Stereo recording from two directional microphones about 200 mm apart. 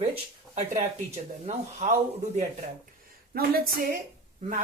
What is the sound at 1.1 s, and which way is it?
Speech, 35° right (ahead or behind).